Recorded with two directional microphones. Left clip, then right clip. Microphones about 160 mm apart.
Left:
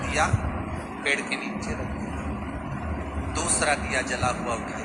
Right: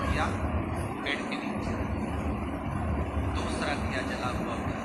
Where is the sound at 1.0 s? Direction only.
90° left.